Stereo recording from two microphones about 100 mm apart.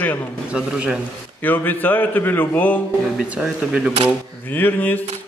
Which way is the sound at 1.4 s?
20° left (ahead or behind).